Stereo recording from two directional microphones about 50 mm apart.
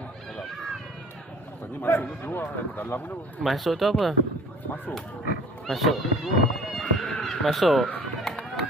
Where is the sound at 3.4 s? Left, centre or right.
Centre.